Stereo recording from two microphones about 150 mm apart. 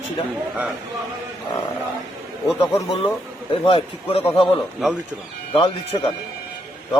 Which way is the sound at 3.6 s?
40° left (ahead or behind).